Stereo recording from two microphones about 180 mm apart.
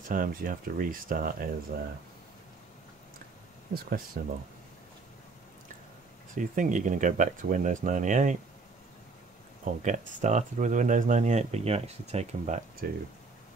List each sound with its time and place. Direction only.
0.1 s speech: 50° right (ahead or behind)
4.2 s speech: 55° right (ahead or behind)
6.3 s speech: 45° right (ahead or behind)
9.7 s speech: 45° right (ahead or behind)
12.8 s speech: 60° right (ahead or behind)